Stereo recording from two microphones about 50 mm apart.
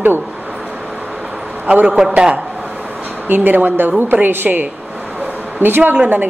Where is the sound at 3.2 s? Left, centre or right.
Right.